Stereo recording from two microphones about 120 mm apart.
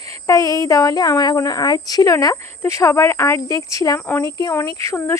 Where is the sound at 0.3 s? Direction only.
30° left (ahead or behind).